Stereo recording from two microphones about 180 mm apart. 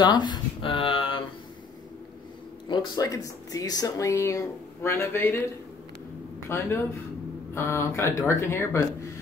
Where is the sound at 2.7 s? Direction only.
20° left (ahead or behind).